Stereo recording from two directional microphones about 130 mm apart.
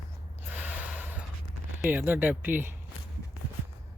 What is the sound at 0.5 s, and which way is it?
Gasp, 10° right (ahead or behind).